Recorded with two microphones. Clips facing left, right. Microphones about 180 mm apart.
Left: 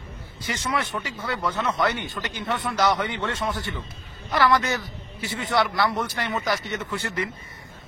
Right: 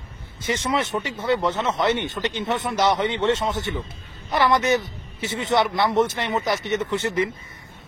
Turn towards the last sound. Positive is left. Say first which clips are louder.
# right 6 dB
turn(degrees=-20)  # may be behind; listen again after turning